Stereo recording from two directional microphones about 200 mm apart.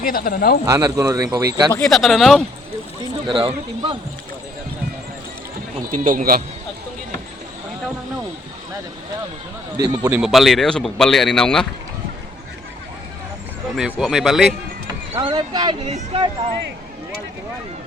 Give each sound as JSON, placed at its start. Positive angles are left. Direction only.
{"t": 0.0, "sound": "speech", "side_deg": 45}
{"t": 0.6, "sound": "speech", "side_deg": -15}
{"t": 1.7, "sound": "speech", "side_deg": 0}
{"t": 3.2, "sound": "speech", "side_deg": -25}
{"t": 5.9, "sound": "speech", "side_deg": -40}
{"t": 9.7, "sound": "speech", "side_deg": -20}
{"t": 10.2, "sound": "speech", "side_deg": 0}
{"t": 13.7, "sound": "speech", "side_deg": -5}
{"t": 15.2, "sound": "speech", "side_deg": -20}